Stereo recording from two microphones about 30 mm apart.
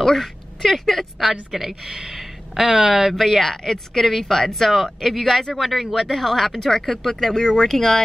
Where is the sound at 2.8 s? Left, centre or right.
Centre.